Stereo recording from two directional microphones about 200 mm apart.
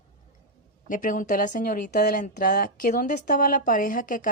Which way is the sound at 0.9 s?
40° left (ahead or behind).